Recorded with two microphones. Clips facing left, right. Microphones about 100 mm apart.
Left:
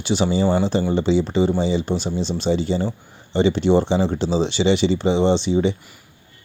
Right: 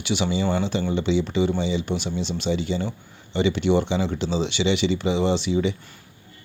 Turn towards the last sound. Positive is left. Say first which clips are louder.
# left 4 dB
turn(degrees=35)  # may be behind; listen again after turning